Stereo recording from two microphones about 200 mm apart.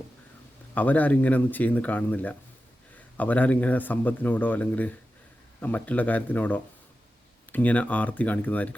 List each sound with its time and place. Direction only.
0.7 s speech: 10° left (ahead or behind)